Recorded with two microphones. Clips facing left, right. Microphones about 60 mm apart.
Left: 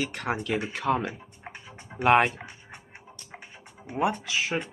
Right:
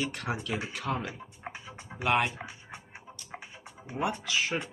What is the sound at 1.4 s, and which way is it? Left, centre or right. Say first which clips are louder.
Music: right 1 dB; centre.